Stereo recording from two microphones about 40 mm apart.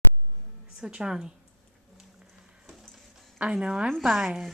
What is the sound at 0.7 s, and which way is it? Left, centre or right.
Speech, right.